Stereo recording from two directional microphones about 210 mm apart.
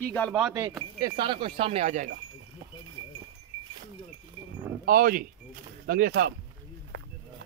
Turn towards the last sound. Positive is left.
turn(degrees=-50)  # may be behind; listen again after turning